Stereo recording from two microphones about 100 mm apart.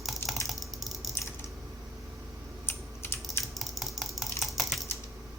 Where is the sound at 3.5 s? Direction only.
Centre (ahead or behind).